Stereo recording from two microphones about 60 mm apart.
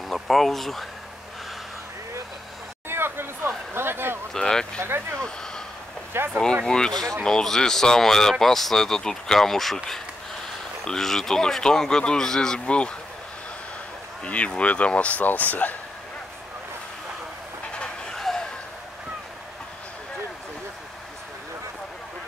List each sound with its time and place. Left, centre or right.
0.1 s speech: centre
2.9 s a sound: right
4.3 s speech: centre
4.8 s speech: right
5.2 s speech: centre
6.1 s speech: right
6.6 s speech: centre
10.9 s speech: centre
14.2 s speech: centre
18.1 s a sound: centre